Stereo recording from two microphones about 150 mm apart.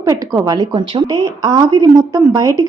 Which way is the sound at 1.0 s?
20° right (ahead or behind).